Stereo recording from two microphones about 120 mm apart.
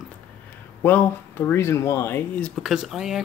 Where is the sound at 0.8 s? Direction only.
15° left (ahead or behind).